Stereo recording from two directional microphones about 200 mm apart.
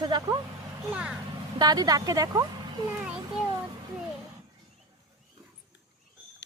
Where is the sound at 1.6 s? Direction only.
20° right (ahead or behind).